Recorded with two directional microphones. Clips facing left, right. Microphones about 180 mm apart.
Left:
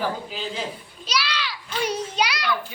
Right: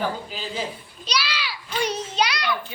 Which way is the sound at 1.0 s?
Centre (ahead or behind).